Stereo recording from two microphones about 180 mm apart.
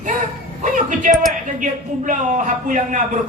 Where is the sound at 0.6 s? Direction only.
45° right (ahead or behind).